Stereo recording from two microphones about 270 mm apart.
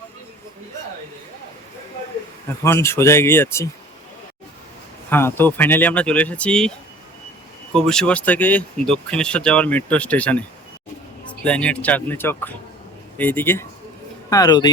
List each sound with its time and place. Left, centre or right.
2.6 s speech: centre
5.0 s speech: centre